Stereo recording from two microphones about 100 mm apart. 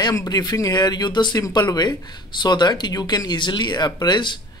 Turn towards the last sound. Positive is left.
turn(degrees=50)  # may be behind; listen again after turning